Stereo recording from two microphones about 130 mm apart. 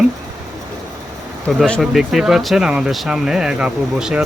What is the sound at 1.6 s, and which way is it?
Speech, centre (ahead or behind).